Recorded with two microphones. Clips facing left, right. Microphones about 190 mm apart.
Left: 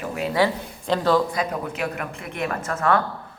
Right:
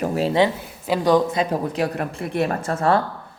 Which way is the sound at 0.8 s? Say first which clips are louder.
Right 2 dB; 10° right (ahead or behind).